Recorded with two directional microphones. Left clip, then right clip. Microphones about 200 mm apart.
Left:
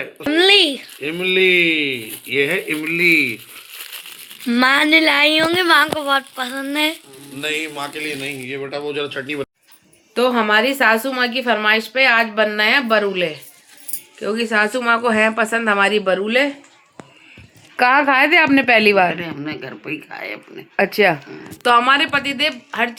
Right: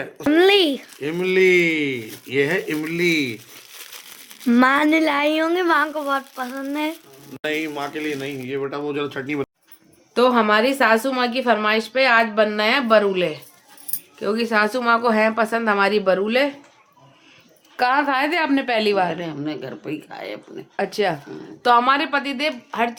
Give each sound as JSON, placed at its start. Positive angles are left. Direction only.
{"t": 0.3, "sound": "a sound", "side_deg": -15}
{"t": 1.0, "sound": "speech", "side_deg": -30}
{"t": 4.4, "sound": "speech", "side_deg": -15}
{"t": 7.4, "sound": "speech", "side_deg": -50}
{"t": 10.2, "sound": "a woman's voice", "side_deg": 0}
{"t": 17.7, "sound": "a woman's voice", "side_deg": 30}
{"t": 19.2, "sound": "speech", "side_deg": -10}
{"t": 20.7, "sound": "a woman's voice", "side_deg": 35}
{"t": 21.6, "sound": "a woman's voice", "side_deg": 10}
{"t": 21.8, "sound": "speech", "side_deg": 0}